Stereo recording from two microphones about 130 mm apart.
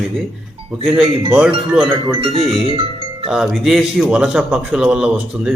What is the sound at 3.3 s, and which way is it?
A man's voice, 5° right (ahead or behind).